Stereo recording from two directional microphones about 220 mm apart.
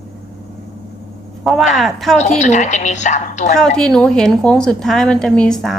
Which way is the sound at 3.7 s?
Centre (ahead or behind).